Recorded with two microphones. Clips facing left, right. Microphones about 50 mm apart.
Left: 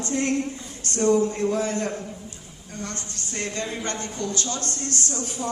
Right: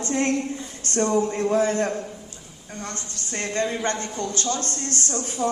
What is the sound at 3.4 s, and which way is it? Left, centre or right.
A man's voice, right.